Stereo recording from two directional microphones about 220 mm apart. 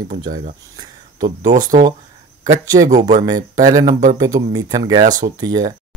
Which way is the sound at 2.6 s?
15° right (ahead or behind).